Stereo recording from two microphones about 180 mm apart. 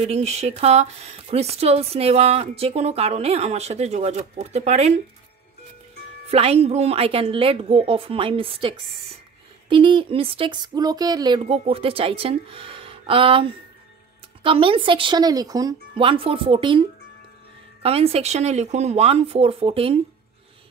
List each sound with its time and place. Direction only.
0.0 s speech: 35° right (ahead or behind)
6.3 s speech: 35° right (ahead or behind)
17.8 s speech: 35° right (ahead or behind)